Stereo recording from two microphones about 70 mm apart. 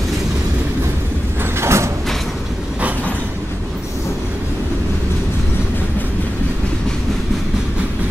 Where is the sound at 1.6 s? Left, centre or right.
Right.